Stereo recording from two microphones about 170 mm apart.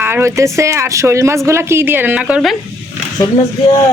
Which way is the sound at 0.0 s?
15° right (ahead or behind).